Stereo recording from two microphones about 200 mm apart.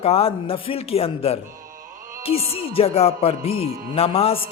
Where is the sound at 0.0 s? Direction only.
30° left (ahead or behind).